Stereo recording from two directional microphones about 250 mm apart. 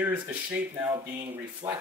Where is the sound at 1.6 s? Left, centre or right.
Right.